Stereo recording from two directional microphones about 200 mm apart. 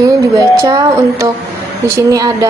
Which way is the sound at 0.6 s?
15° right (ahead or behind).